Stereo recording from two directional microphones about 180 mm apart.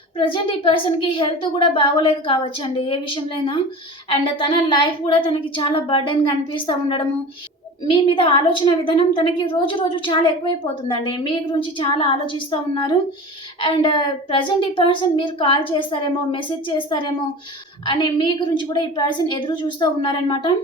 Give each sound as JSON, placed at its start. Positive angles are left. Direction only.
{"t": 0.2, "sound": "a woman's voice", "side_deg": 30}